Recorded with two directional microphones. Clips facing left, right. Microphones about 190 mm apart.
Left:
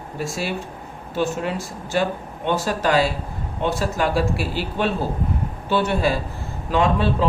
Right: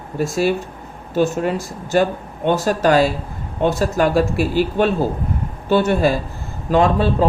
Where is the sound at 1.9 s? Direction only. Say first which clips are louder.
Right 5 dB; 45° right (ahead or behind).